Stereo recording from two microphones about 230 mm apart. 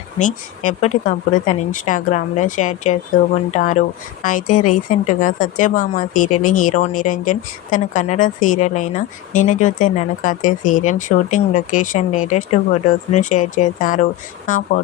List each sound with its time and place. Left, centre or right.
0.2 s a woman's voice: left